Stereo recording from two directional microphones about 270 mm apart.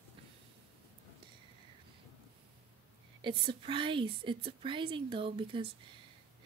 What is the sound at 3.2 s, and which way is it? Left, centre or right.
A woman's voice, centre.